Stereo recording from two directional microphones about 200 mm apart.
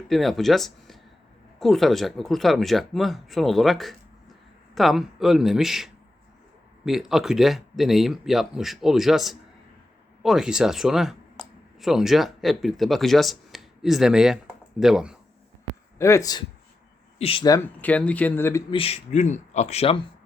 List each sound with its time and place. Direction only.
0.1 s speech: centre (ahead or behind)
16.0 s a man's voice: 15° left (ahead or behind)
17.2 s a man's voice: 30° left (ahead or behind); by 18.6 s 10° left (ahead or behind)
18.7 s speech: 30° left (ahead or behind)